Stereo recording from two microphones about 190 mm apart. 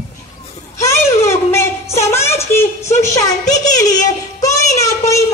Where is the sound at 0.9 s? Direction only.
15° left (ahead or behind).